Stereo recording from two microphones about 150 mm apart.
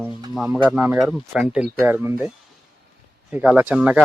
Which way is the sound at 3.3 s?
10° right (ahead or behind).